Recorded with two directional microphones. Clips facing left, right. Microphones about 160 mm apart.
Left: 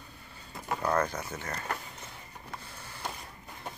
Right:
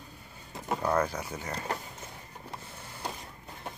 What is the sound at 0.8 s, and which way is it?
Speech, 10° right (ahead or behind).